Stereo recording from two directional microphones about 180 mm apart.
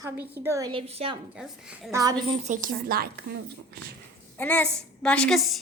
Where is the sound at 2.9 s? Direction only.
55° right (ahead or behind).